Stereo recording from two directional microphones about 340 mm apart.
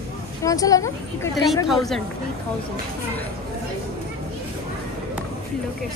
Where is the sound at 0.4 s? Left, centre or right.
Centre.